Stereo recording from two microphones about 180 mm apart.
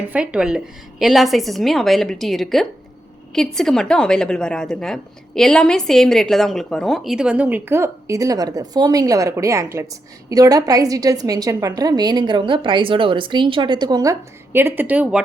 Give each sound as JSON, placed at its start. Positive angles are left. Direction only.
{"t": 0.1, "sound": "a woman's voice", "side_deg": -5}